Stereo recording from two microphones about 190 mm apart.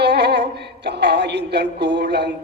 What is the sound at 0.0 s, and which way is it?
Music, 60° right (ahead or behind).